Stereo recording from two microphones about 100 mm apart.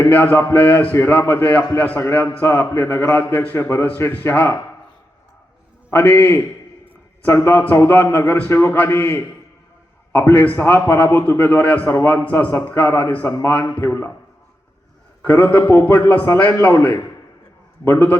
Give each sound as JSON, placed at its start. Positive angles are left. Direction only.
{"t": 0.1, "sound": "a man's voice", "side_deg": 15}
{"t": 5.9, "sound": "a man's voice", "side_deg": 20}
{"t": 11.9, "sound": "a man's voice", "side_deg": 25}
{"t": 12.1, "sound": "a man's voice", "side_deg": 15}
{"t": 15.2, "sound": "a man's voice", "side_deg": 20}
{"t": 17.8, "sound": "a man's voice", "side_deg": 20}